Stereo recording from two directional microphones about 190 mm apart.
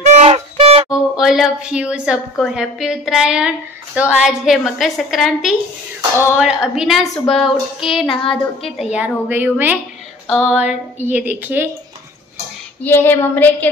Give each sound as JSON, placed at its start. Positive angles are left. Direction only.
{"t": 0.0, "sound": "music", "side_deg": -35}
{"t": 0.8, "sound": "a woman's voice", "side_deg": 0}
{"t": 12.8, "sound": "a woman's voice", "side_deg": 10}